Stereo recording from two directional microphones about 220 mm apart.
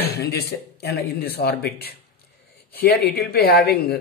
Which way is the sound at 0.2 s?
50° left (ahead or behind).